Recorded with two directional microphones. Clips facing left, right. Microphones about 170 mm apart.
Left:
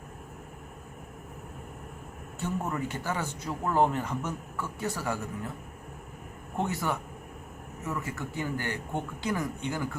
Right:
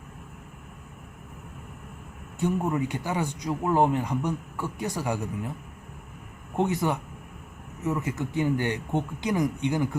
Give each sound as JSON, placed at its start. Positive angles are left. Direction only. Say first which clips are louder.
{"t": 2.4, "sound": "a man's voice", "louder": "right 6 dB", "side_deg": -15}
{"t": 6.6, "sound": "a man's voice", "louder": "right 5 dB", "side_deg": -20}